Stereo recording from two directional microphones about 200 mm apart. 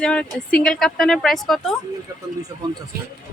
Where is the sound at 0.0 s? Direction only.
5° left (ahead or behind).